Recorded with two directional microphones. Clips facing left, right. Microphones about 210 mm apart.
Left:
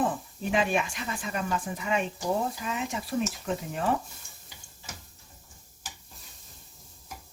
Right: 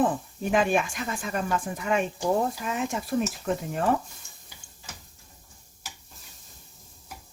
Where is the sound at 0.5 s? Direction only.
50° right (ahead or behind).